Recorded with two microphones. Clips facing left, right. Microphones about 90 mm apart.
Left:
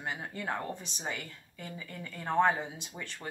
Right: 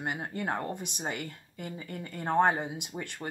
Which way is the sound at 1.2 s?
45° right (ahead or behind).